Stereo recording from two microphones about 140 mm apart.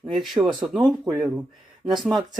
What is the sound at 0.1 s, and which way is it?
Speech, centre (ahead or behind).